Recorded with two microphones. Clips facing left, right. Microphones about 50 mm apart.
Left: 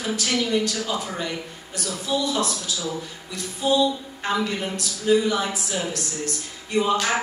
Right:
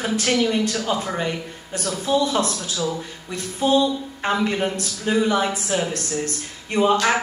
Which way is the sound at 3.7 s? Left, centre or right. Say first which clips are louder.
Right 1 dB; right.